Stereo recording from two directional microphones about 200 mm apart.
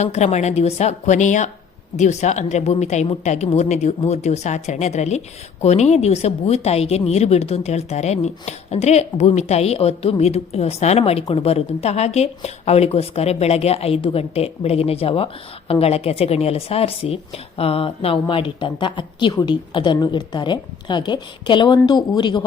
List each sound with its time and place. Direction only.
0.0 s a woman's voice: 35° left (ahead or behind)